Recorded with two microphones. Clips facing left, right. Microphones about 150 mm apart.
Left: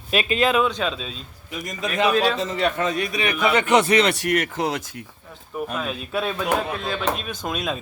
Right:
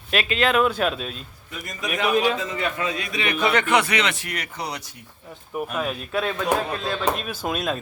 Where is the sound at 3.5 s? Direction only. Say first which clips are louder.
Left 3 dB; 15° left (ahead or behind).